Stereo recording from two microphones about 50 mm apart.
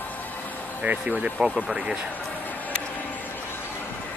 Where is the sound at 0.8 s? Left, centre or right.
Right.